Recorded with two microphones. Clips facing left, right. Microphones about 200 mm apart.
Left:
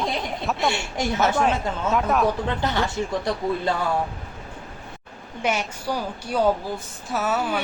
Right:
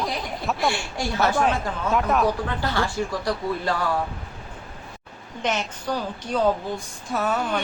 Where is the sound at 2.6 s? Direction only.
20° left (ahead or behind).